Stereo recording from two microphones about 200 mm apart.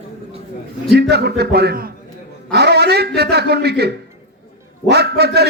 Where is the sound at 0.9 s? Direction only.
55° right (ahead or behind).